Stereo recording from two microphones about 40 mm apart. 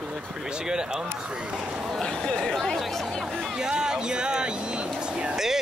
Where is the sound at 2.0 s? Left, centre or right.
Centre.